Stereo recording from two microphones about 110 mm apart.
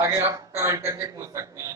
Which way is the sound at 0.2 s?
25° right (ahead or behind).